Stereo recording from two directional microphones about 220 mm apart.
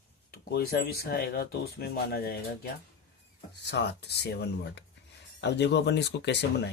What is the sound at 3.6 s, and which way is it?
Speech, 50° left (ahead or behind).